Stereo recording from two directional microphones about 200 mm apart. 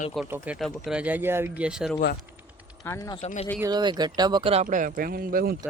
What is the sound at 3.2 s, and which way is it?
Speech, 30° left (ahead or behind).